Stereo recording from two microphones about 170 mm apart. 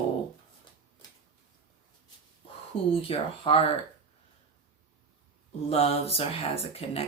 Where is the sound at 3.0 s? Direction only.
30° left (ahead or behind).